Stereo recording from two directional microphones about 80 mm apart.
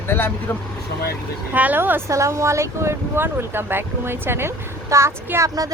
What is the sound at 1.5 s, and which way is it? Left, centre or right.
Speech, right.